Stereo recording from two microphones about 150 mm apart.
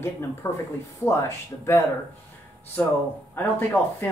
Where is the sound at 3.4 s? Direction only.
15° left (ahead or behind).